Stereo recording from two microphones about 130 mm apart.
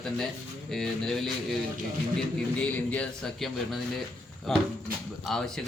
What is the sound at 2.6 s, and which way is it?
A man's voice, 10° left (ahead or behind).